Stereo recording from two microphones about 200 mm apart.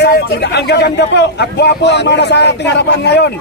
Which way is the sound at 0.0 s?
55° left (ahead or behind).